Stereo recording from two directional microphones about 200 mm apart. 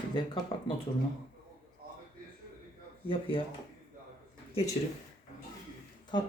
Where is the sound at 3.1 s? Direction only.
25° left (ahead or behind).